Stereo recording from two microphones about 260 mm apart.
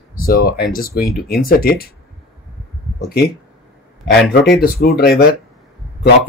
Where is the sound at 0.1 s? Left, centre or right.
Left.